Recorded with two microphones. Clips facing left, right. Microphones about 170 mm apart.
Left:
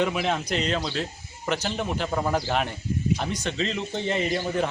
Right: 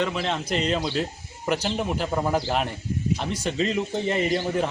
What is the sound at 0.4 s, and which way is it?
Speech, 5° right (ahead or behind).